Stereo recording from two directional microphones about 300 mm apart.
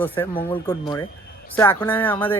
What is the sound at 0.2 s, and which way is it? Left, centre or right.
Speech, centre.